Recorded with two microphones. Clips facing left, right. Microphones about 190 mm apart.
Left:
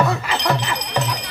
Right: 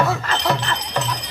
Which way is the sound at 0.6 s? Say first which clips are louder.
Left 1 dB; 10° left (ahead or behind).